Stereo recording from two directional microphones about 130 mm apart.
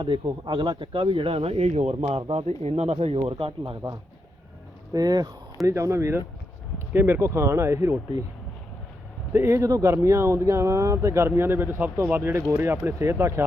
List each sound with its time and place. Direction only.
0.0 s speech: 35° right (ahead or behind)
4.9 s speech: 30° right (ahead or behind)
9.3 s speech: 20° right (ahead or behind)